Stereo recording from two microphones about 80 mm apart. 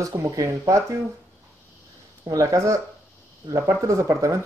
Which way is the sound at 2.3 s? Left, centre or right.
Right.